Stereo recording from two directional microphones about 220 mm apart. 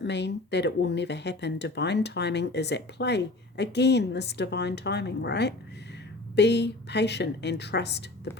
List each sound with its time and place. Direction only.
0.0 s speech: 50° left (ahead or behind)